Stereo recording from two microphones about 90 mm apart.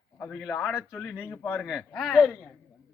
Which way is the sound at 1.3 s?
25° left (ahead or behind).